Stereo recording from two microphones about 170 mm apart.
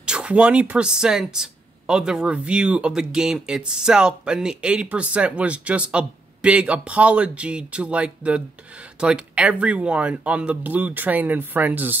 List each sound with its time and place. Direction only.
0.0 s speech: 5° right (ahead or behind)